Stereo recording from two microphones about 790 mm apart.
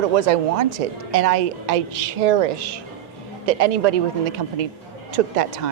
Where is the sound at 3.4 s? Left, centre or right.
Right.